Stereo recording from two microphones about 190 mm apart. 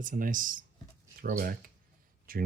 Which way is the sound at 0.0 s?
45° right (ahead or behind).